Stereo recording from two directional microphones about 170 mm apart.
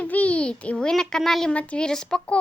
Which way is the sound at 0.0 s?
10° left (ahead or behind).